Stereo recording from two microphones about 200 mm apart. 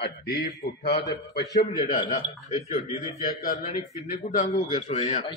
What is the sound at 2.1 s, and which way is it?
Speech, 35° left (ahead or behind).